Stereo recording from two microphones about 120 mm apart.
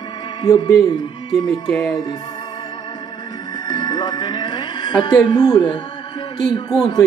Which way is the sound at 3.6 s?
35° left (ahead or behind).